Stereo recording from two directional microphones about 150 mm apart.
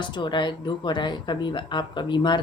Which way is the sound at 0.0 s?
30° left (ahead or behind).